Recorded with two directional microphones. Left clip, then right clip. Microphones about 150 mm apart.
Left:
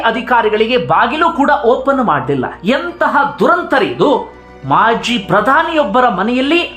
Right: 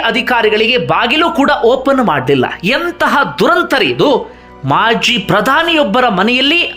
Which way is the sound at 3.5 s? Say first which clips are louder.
Right 2 dB; 20° right (ahead or behind).